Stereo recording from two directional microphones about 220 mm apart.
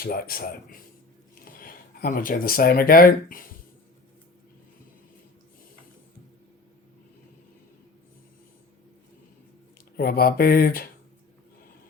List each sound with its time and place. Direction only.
0.0 s speech: 40° left (ahead or behind)
10.0 s speech: 45° left (ahead or behind)